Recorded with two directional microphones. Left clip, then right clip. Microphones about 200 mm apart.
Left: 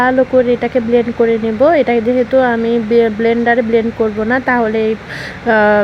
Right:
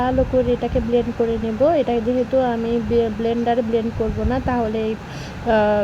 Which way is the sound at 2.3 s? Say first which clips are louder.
Left 8 dB; 15° left (ahead or behind).